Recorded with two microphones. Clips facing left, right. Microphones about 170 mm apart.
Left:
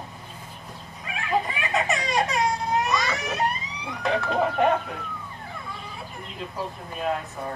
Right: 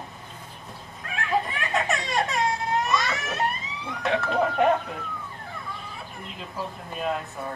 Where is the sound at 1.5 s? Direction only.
Centre (ahead or behind).